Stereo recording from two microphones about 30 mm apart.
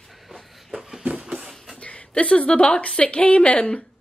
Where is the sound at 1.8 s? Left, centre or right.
Left.